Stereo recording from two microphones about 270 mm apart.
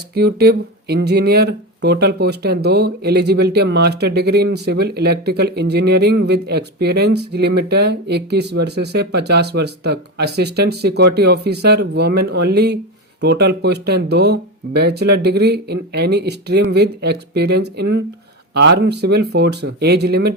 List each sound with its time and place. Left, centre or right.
0.1 s speech: right